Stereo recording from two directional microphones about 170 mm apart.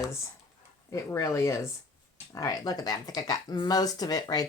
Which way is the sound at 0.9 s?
20° left (ahead or behind).